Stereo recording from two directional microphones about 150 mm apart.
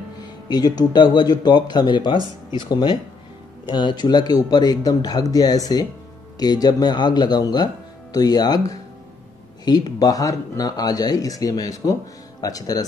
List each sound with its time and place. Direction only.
0.5 s speech: 25° left (ahead or behind)